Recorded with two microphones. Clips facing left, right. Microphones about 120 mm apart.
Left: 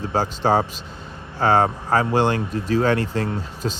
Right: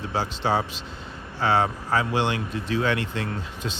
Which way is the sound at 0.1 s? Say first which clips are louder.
Left 5 dB; 45° left (ahead or behind).